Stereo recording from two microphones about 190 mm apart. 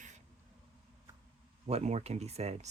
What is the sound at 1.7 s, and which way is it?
Speech, 35° right (ahead or behind).